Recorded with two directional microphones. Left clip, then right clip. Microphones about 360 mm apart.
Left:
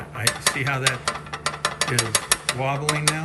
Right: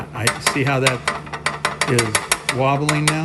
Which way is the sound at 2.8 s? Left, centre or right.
Centre.